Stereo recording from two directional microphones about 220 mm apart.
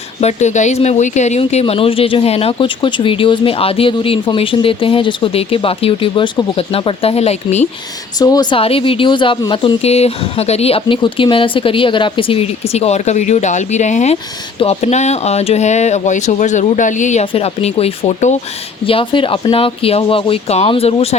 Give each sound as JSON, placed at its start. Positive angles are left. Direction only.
{"t": 0.2, "sound": "speech", "side_deg": 30}
{"t": 8.2, "sound": "speech", "side_deg": 15}